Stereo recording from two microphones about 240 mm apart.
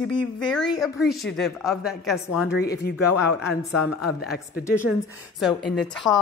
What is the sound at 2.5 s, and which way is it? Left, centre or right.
Speech, left.